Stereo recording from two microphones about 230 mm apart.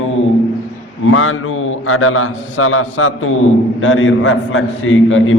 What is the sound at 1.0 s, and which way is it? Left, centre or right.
A man's voice, left.